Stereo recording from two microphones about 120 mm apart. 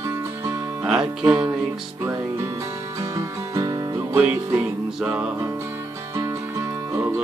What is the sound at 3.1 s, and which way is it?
Music, 25° right (ahead or behind).